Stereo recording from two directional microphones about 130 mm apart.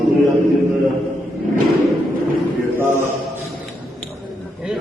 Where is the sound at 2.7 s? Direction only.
15° right (ahead or behind).